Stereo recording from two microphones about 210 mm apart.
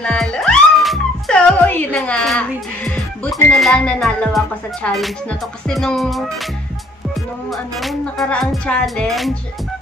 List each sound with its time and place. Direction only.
0.0 s music: 5° left (ahead or behind)
7.5 s music: centre (ahead or behind)